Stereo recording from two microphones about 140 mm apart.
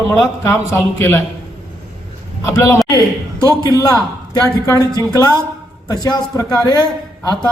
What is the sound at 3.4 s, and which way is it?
Speech, 30° left (ahead or behind).